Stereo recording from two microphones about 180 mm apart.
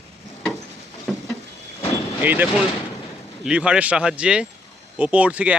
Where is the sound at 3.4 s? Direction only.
5° right (ahead or behind).